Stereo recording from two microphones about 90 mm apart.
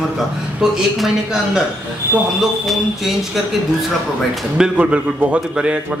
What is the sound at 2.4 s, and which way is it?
A man's voice, centre (ahead or behind).